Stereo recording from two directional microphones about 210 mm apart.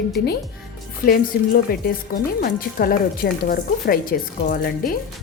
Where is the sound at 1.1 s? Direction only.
45° left (ahead or behind).